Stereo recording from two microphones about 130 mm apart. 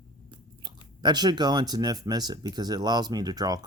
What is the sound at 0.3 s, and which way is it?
Speech, 35° right (ahead or behind).